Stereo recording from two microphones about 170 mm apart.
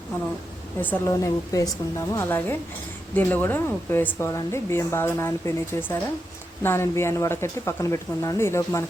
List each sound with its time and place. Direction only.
0.8 s speech: 10° left (ahead or behind)
1.1 s speech: 20° left (ahead or behind)